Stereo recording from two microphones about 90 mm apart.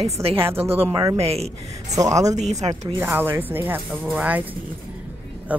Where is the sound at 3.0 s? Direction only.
25° right (ahead or behind).